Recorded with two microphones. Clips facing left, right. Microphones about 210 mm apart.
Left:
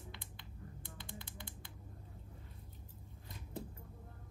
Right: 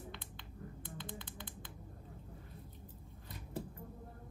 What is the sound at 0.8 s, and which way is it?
Typing, 20° right (ahead or behind).